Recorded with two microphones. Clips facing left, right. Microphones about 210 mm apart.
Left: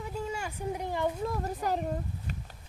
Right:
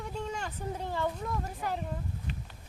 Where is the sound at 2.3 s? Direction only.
45° left (ahead or behind).